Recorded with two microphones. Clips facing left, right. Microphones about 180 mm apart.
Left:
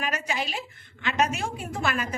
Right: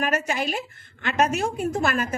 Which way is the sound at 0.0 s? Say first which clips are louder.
Right 5 dB; 45° right (ahead or behind).